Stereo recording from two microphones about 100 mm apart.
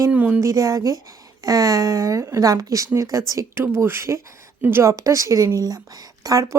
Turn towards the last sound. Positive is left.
turn(degrees=-35)  # may be behind; listen again after turning